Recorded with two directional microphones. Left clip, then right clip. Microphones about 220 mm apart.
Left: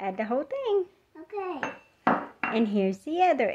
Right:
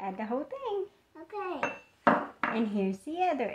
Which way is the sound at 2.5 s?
45° left (ahead or behind).